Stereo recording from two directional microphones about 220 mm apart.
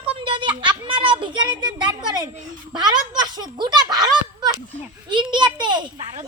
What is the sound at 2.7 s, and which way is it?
Speech, 20° right (ahead or behind).